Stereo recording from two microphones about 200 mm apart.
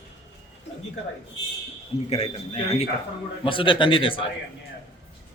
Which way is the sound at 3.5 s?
25° left (ahead or behind).